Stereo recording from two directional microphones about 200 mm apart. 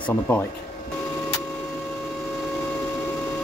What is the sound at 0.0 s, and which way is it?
Speech, 10° left (ahead or behind).